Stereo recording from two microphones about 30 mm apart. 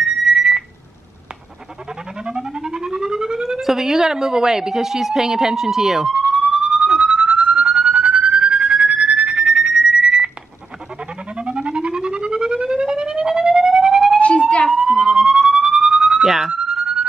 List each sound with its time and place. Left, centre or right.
0.0 s alarm: right
2.2 s a sound: right
3.6 s speech: centre
6.4 s police car: right
11.5 s siren: right
14.8 s emergency vehicle: right
15.0 s police car: centre